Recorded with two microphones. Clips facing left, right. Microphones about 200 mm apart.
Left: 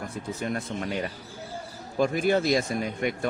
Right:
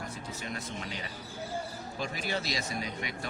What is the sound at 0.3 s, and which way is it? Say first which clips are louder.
Speech: left 8 dB; 50° left (ahead or behind).